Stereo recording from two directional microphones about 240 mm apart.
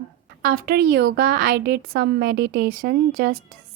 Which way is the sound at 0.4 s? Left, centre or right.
Right.